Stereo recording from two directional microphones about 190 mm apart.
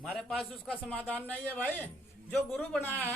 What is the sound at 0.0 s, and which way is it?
A man's voice, centre (ahead or behind).